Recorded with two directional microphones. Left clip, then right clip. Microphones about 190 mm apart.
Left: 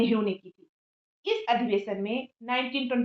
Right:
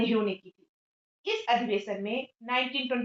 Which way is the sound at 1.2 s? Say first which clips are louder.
Left 1 dB; 40° left (ahead or behind).